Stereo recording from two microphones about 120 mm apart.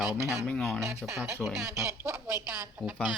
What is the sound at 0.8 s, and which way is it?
Speech, 25° right (ahead or behind).